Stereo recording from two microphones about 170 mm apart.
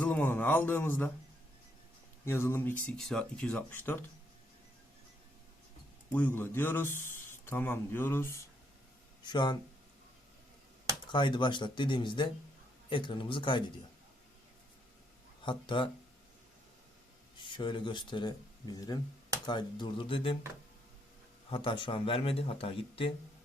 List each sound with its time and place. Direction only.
0.0 s a sound: 10° left (ahead or behind)
2.2 s a man's voice: 15° left (ahead or behind)
6.1 s a man's voice: 10° left (ahead or behind)
9.2 s speech: 25° left (ahead or behind)
11.1 s speech: 30° left (ahead or behind)
15.4 s speech: 30° left (ahead or behind)
17.3 s speech: 30° left (ahead or behind)
21.5 s speech: 30° left (ahead or behind)